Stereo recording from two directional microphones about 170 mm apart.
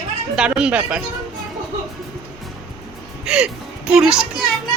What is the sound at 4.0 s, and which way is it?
Speech, 5° right (ahead or behind).